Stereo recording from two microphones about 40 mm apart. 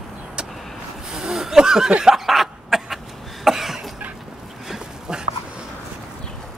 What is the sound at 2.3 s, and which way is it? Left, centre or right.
Cough, centre.